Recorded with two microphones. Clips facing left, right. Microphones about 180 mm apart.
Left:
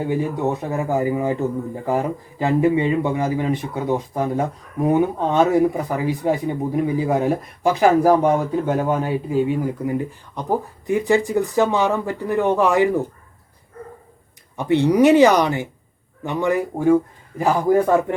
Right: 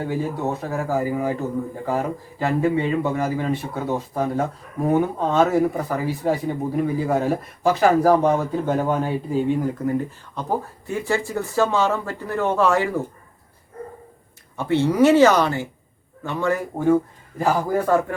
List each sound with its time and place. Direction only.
0.0 s speech: 15° left (ahead or behind)
14.5 s speech: 15° left (ahead or behind)